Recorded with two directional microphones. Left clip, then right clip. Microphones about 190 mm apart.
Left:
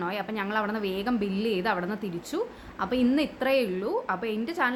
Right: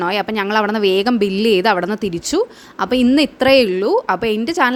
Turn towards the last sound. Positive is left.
turn(degrees=-55)  # may be behind; listen again after turning